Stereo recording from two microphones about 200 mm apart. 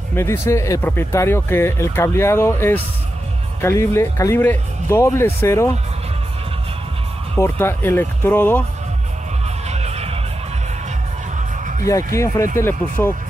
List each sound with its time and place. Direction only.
0.1 s speech: 10° left (ahead or behind)
7.3 s speech: 10° left (ahead or behind)
9.7 s music: 30° right (ahead or behind)
12.1 s speech: 15° left (ahead or behind)